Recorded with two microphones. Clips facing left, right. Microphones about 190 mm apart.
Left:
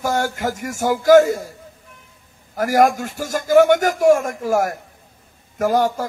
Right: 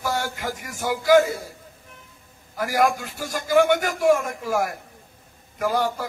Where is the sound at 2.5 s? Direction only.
45° left (ahead or behind).